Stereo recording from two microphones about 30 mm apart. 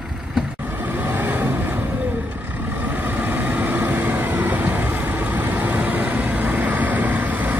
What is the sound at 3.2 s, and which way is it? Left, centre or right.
Vehicle, right.